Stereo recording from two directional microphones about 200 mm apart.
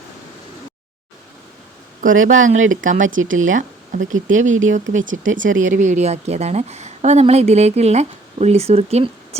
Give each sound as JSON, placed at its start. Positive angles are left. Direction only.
{"t": 2.0, "sound": "a woman's voice", "side_deg": -40}
{"t": 3.5, "sound": "a sound", "side_deg": -40}
{"t": 4.1, "sound": "a woman's voice", "side_deg": -40}